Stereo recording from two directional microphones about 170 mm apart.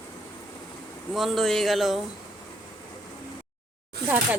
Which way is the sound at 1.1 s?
Centre (ahead or behind).